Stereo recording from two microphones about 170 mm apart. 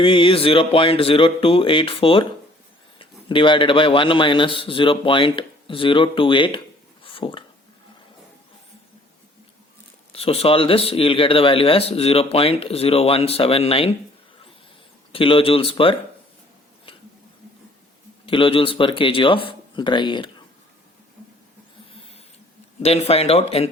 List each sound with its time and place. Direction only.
0.0 s a man's voice: 30° left (ahead or behind)
7.0 s a sound: 30° left (ahead or behind)
10.1 s speech: 35° left (ahead or behind)
15.1 s speech: 35° left (ahead or behind)
18.3 s a man's voice: 30° left (ahead or behind)
22.8 s speech: 35° left (ahead or behind)